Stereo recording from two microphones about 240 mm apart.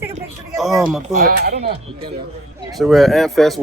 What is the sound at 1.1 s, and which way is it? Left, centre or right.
Speech, right.